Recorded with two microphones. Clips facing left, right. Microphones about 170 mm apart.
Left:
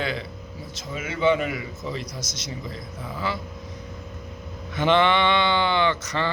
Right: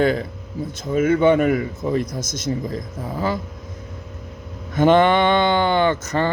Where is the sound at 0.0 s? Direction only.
45° right (ahead or behind).